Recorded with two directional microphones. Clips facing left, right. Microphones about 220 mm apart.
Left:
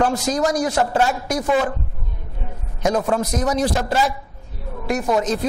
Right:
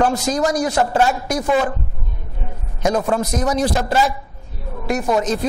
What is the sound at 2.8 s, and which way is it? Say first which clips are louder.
A man's voice: right 1 dB; 25° right (ahead or behind).